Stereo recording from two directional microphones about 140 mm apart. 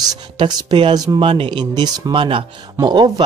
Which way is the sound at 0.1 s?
30° right (ahead or behind).